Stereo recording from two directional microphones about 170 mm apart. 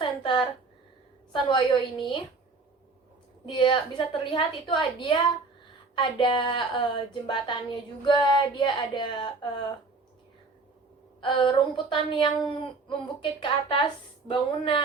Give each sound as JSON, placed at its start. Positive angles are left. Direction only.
{"t": 0.0, "sound": "a sound", "side_deg": 30}
{"t": 1.3, "sound": "a woman's voice", "side_deg": 30}
{"t": 3.4, "sound": "a woman's voice", "side_deg": 30}
{"t": 11.2, "sound": "a woman's voice", "side_deg": 30}
{"t": 13.4, "sound": "a woman's voice", "side_deg": 30}